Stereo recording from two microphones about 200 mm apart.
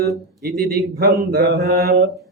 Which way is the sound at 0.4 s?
50° right (ahead or behind).